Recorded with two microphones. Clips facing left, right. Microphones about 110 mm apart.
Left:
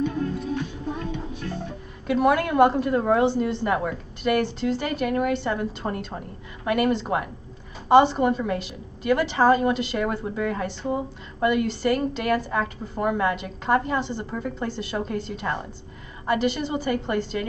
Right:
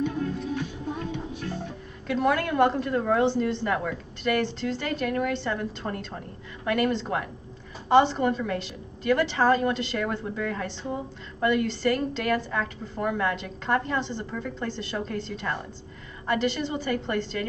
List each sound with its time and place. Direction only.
0.6 s music: 35° left (ahead or behind)
2.0 s a woman's voice: 10° left (ahead or behind)